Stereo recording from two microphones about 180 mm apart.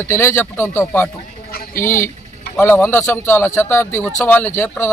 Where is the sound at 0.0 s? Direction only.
15° left (ahead or behind).